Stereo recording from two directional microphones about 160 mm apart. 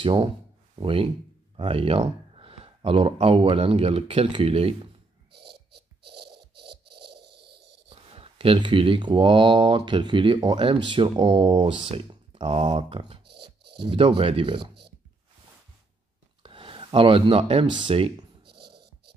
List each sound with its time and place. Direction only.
0.0 s speech: 30° right (ahead or behind)
5.3 s music: 90° right
7.9 s speech: 35° right (ahead or behind)
16.4 s speech: 35° right (ahead or behind)